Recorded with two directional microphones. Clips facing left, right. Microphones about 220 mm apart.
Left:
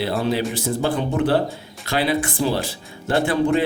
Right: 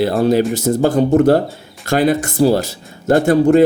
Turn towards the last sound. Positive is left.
turn(degrees=-45)  # may be behind; listen again after turning